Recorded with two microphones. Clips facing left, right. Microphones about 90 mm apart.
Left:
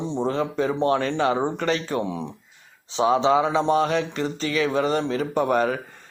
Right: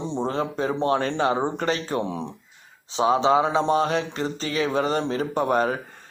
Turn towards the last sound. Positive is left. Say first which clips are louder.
# left 1 dB
turn(degrees=-35)  # may be behind; listen again after turning